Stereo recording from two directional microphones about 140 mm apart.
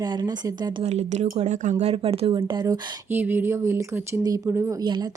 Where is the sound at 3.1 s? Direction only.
15° right (ahead or behind).